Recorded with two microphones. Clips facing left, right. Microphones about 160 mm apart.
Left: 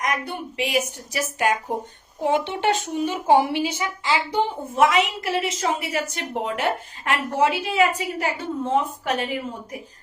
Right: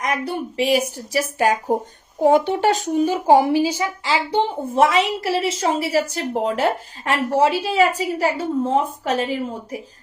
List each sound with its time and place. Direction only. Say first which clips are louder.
0.0 s speech: right 3 dB; 35° right (ahead or behind)